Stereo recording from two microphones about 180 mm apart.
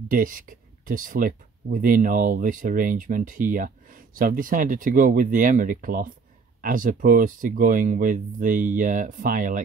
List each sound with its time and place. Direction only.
0.1 s speech: 50° right (ahead or behind)